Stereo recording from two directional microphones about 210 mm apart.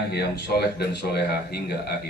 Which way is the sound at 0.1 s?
50° left (ahead or behind).